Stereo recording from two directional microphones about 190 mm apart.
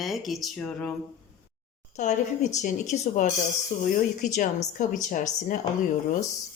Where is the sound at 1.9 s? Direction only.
40° left (ahead or behind).